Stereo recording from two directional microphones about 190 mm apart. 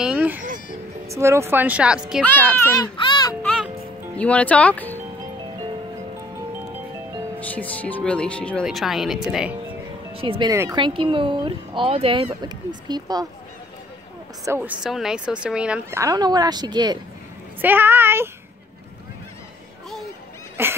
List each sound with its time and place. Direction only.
0.0 s music: 5° right (ahead or behind)
1.0 s speech: 15° right (ahead or behind)
2.2 s speech: 10° left (ahead or behind)
3.0 s music: 20° left (ahead or behind)
3.4 s music: centre (ahead or behind)
4.2 s speech: 5° left (ahead or behind)
7.3 s speech: 10° left (ahead or behind)
10.1 s speech: 30° right (ahead or behind)
10.5 s speech: 20° right (ahead or behind)
14.4 s speech: 10° right (ahead or behind)
16.0 s speech: 20° right (ahead or behind)
17.6 s speech: 10° right (ahead or behind)
20.6 s speech: 10° right (ahead or behind)